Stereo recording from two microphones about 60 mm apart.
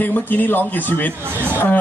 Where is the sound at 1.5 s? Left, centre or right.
Left.